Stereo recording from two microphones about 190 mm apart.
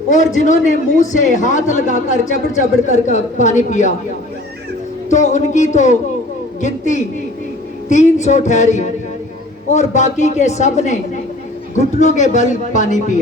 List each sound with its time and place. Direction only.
0.1 s a man's voice: 40° left (ahead or behind)
5.1 s a man's voice: 40° left (ahead or behind)